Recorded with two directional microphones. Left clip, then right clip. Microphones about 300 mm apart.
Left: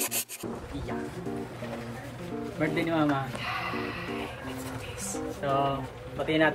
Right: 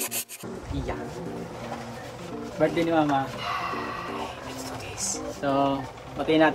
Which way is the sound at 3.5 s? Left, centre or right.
Centre.